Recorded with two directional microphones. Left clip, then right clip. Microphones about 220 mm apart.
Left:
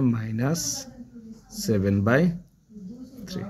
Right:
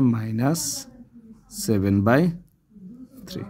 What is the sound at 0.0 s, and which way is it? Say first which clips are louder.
Speech: right 4 dB; 55° right (ahead or behind).